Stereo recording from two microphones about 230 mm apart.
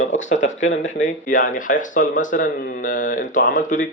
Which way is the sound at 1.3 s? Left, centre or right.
Left.